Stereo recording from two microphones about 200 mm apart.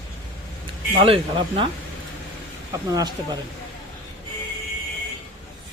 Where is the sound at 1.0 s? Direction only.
25° right (ahead or behind).